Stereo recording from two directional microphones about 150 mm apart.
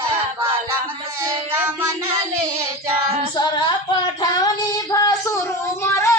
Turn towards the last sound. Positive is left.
turn(degrees=20)  # may be behind; listen again after turning